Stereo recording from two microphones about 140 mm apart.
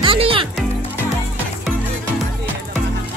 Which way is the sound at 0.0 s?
40° right (ahead or behind).